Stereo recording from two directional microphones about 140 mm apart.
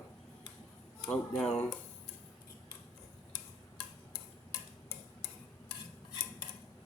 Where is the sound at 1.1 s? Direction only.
Centre (ahead or behind).